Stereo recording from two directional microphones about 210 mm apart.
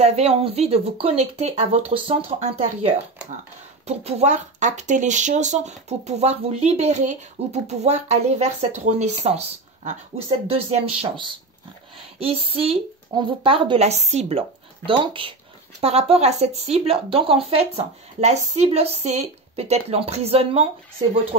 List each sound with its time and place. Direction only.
0.0 s speech: 30° right (ahead or behind)
10.5 s speech: 25° right (ahead or behind)